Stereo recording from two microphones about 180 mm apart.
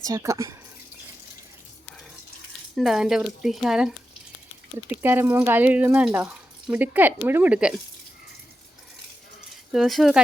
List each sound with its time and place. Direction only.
0.0 s speech: 20° right (ahead or behind)
2.7 s speech: centre (ahead or behind)
9.7 s speech: centre (ahead or behind)